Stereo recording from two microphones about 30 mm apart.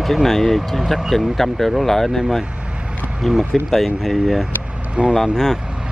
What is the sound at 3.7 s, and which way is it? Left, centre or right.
Speech, centre.